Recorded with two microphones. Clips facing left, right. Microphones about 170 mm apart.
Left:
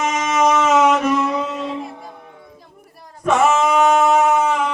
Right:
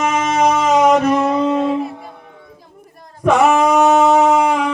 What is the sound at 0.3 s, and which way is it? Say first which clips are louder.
Music: even; 35° right (ahead or behind).